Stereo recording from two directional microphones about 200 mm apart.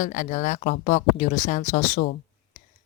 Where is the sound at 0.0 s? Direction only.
40° left (ahead or behind).